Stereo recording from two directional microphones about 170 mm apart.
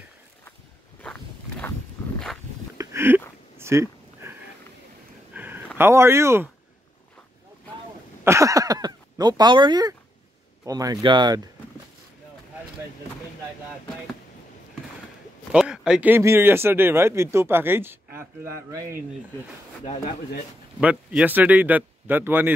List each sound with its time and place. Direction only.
2.8 s a sound: 15° right (ahead or behind)
5.8 s speech: 15° right (ahead or behind)
8.2 s speech: 15° right (ahead or behind)
15.5 s speech: 5° right (ahead or behind)
20.8 s speech: 5° right (ahead or behind)